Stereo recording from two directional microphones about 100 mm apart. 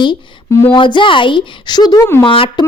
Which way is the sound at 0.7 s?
55° left (ahead or behind).